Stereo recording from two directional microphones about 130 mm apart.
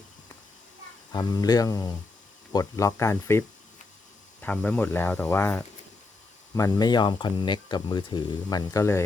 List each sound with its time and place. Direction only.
1.1 s speech: 30° left (ahead or behind)